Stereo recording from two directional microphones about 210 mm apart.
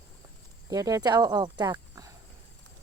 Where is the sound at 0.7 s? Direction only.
15° right (ahead or behind).